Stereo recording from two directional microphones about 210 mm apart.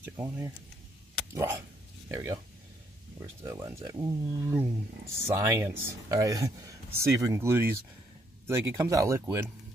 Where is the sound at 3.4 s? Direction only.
15° right (ahead or behind).